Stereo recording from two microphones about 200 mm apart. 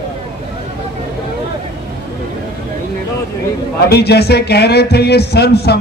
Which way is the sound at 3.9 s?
55° left (ahead or behind).